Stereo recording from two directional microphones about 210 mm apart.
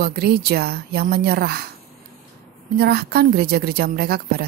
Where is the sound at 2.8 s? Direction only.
50° right (ahead or behind).